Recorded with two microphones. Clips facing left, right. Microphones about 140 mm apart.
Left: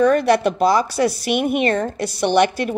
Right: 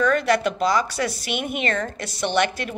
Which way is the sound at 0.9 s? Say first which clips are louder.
Left 7 dB; 45° left (ahead or behind).